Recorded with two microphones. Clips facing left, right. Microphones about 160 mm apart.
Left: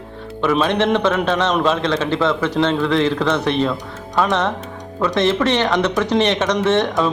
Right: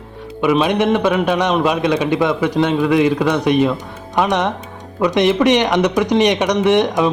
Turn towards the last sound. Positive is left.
turn(degrees=-15)  # may be behind; listen again after turning